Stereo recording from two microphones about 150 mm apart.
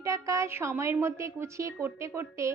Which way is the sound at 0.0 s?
20° right (ahead or behind).